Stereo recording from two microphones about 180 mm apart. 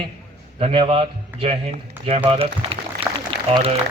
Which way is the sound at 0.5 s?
35° right (ahead or behind).